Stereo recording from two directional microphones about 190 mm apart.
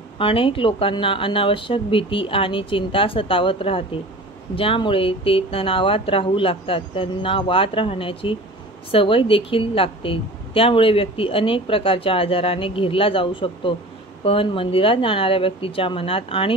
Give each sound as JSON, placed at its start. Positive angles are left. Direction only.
{"t": 0.2, "sound": "a woman's voice", "side_deg": 30}